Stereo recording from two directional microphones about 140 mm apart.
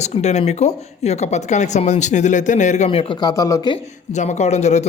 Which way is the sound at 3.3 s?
25° left (ahead or behind).